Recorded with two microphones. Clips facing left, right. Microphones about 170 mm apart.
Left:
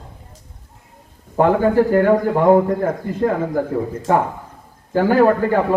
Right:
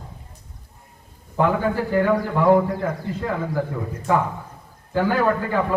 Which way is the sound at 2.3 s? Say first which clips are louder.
Left 4 dB; 40° left (ahead or behind).